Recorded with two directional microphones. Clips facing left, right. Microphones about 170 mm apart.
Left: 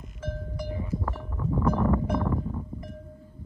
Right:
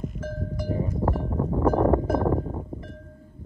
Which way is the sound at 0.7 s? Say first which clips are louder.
Right 7 dB; 40° right (ahead or behind).